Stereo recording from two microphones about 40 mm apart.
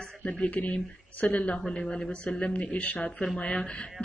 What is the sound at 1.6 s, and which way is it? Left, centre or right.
Speech, centre.